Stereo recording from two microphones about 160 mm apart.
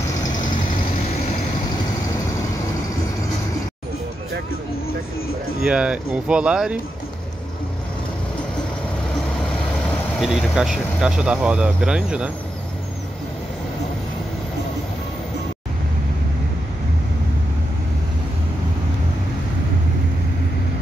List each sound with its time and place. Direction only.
0.2 s vehicle: 25° left (ahead or behind)
5.6 s speech: 5° right (ahead or behind)
9.8 s speech: centre (ahead or behind)